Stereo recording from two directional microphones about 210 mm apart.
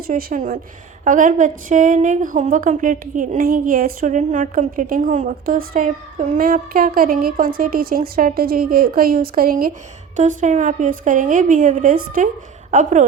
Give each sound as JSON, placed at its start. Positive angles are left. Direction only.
{"t": 0.1, "sound": "a woman's voice", "side_deg": -40}